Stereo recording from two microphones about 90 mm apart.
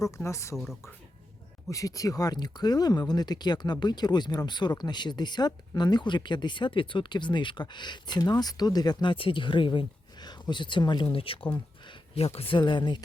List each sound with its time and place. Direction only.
0.0 s speech: 35° left (ahead or behind)
0.5 s speech: centre (ahead or behind)
1.7 s speech: 40° left (ahead or behind); by 13.0 s 60° left (ahead or behind)